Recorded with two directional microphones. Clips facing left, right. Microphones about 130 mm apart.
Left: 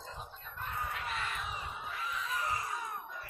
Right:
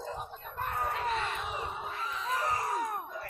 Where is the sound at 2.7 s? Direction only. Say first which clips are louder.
Right 7 dB; 65° right (ahead or behind).